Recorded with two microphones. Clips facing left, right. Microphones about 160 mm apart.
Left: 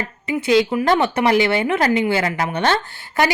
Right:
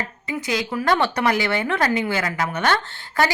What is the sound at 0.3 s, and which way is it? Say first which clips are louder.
A woman's voice: left 9 dB; 25° left (ahead or behind).